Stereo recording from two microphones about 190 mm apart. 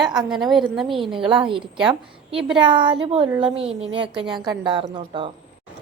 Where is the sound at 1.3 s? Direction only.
25° right (ahead or behind).